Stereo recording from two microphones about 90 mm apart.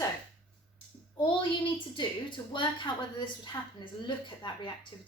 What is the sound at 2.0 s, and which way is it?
A woman's voice, 60° left (ahead or behind).